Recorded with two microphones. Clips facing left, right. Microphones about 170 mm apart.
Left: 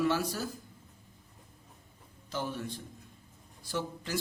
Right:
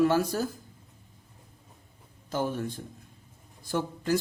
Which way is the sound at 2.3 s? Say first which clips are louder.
Right 6 dB; 45° right (ahead or behind).